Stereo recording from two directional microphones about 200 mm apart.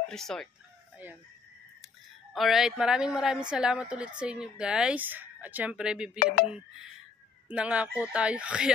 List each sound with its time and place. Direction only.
0.1 s speech: centre (ahead or behind)
2.3 s speech: centre (ahead or behind)
6.1 s speech: 50° left (ahead or behind)
6.4 s speech: 5° right (ahead or behind)